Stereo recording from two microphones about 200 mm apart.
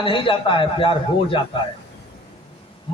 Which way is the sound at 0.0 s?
25° left (ahead or behind).